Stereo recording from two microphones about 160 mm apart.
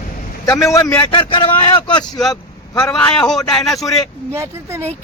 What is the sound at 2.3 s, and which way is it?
Vehicle, 20° left (ahead or behind).